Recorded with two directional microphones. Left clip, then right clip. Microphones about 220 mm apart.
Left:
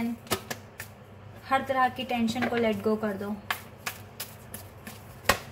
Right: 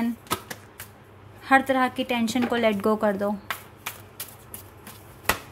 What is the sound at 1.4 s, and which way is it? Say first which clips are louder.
A woman's voice: right 5 dB; 50° right (ahead or behind).